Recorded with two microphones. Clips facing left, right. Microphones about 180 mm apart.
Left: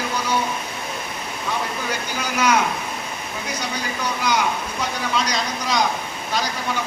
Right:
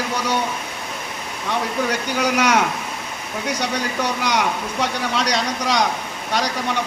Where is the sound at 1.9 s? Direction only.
75° right (ahead or behind).